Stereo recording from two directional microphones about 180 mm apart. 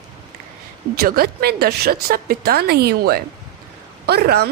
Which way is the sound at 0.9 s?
55° right (ahead or behind).